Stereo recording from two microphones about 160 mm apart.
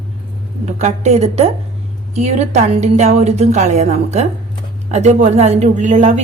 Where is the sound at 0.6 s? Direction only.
45° right (ahead or behind).